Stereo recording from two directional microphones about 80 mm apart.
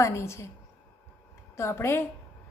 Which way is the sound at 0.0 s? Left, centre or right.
Left.